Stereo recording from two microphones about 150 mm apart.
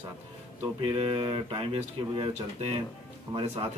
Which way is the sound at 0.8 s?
40° right (ahead or behind).